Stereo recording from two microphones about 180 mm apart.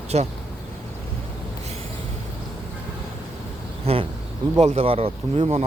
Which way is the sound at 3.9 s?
35° right (ahead or behind).